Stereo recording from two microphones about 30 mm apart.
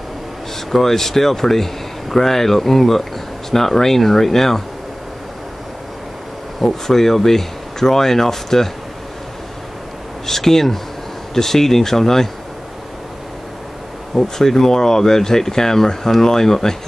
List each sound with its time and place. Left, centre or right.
0.7 s speech: centre
6.6 s speech: centre
10.2 s speech: centre
14.1 s speech: centre